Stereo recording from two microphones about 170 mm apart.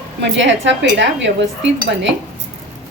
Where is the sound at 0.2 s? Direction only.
90° right.